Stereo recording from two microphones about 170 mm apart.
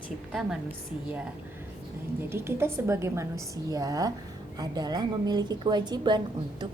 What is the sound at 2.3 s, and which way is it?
A woman's voice, 15° right (ahead or behind).